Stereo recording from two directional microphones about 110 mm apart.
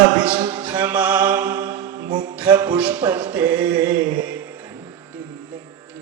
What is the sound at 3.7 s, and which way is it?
Music, 45° right (ahead or behind).